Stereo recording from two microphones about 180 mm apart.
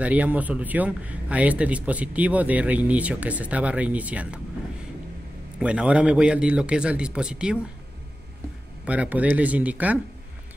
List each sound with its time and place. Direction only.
0.0 s speech: 10° right (ahead or behind)
5.6 s a man's voice: 5° right (ahead or behind)
8.8 s speech: 5° right (ahead or behind)